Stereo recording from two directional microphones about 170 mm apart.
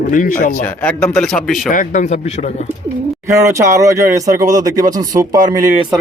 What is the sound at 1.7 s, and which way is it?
Speech, 50° left (ahead or behind).